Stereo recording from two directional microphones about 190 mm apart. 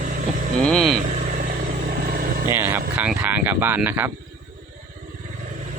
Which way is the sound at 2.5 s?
10° right (ahead or behind).